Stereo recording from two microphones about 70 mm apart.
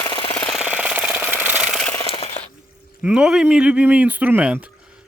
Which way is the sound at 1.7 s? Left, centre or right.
Centre.